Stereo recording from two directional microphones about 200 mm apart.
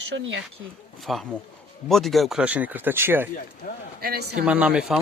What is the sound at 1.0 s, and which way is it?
Speech, centre (ahead or behind).